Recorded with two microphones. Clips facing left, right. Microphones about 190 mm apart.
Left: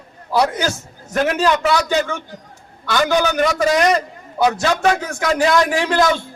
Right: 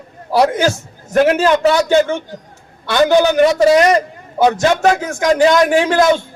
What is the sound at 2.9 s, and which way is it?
Speech, 30° right (ahead or behind).